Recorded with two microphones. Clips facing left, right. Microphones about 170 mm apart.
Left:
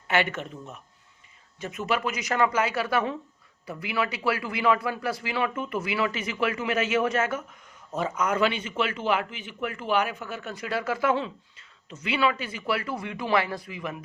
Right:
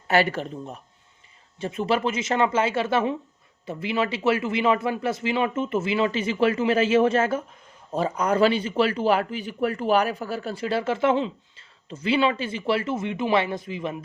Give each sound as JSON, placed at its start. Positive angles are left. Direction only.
{"t": 0.1, "sound": "a man's voice", "side_deg": -35}